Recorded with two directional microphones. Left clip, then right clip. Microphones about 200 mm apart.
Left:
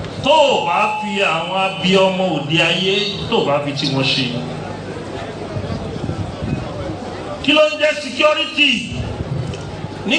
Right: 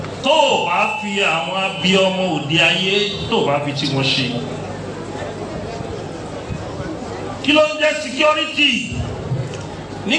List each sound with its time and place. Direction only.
0.3 s speech: 40° left (ahead or behind)
7.4 s speech: 40° left (ahead or behind)